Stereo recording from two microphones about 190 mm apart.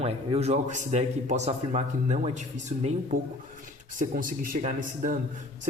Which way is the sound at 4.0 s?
45° right (ahead or behind).